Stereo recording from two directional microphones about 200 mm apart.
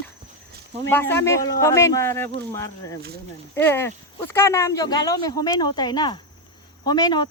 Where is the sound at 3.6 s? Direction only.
10° left (ahead or behind).